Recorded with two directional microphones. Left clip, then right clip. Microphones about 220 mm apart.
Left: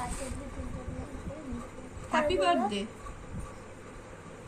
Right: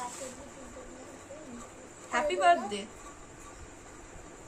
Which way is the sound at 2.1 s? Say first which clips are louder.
Right 1 dB; 25° right (ahead or behind).